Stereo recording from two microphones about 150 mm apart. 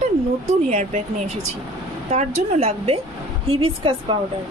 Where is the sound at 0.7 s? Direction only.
50° right (ahead or behind).